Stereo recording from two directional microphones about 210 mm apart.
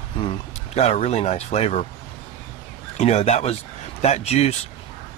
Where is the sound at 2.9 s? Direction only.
30° left (ahead or behind).